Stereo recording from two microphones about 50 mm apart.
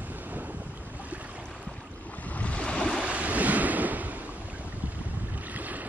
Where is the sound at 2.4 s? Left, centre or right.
Left.